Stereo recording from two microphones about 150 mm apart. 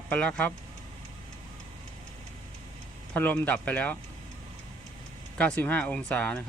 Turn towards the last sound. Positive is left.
turn(degrees=10)  # may be behind; listen again after turning